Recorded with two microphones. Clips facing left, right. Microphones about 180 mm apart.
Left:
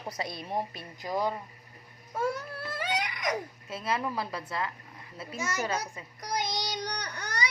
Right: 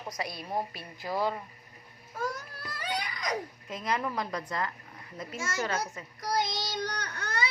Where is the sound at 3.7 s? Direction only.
10° left (ahead or behind).